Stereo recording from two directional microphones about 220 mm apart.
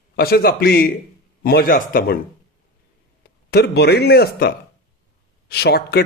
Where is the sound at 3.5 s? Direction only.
45° left (ahead or behind).